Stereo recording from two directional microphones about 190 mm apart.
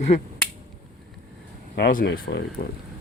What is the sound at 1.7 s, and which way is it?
Speech, 55° left (ahead or behind).